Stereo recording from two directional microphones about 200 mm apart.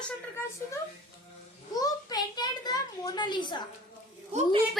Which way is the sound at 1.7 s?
20° left (ahead or behind).